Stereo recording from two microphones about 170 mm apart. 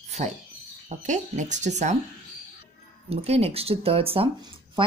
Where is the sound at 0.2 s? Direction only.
40° right (ahead or behind).